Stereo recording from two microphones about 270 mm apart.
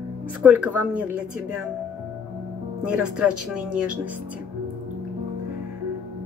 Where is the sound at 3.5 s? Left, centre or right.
Centre.